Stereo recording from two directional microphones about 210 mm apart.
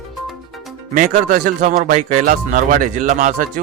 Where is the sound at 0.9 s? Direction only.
40° right (ahead or behind).